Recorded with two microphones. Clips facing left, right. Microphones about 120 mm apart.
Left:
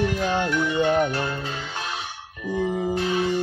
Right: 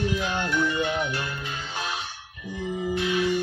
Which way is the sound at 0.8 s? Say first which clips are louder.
Left 6 dB; 45° left (ahead or behind).